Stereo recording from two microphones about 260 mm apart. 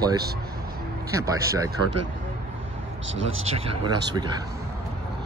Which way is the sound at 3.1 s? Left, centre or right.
Right.